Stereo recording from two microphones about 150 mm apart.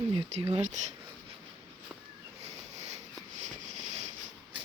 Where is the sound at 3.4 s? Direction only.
50° right (ahead or behind).